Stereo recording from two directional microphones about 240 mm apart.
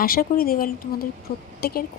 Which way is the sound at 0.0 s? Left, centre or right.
Left.